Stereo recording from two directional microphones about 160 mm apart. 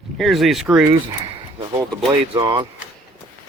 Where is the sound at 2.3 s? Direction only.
30° right (ahead or behind).